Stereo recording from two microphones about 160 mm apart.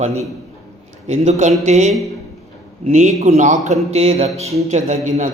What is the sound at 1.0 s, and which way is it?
Speech, 45° right (ahead or behind).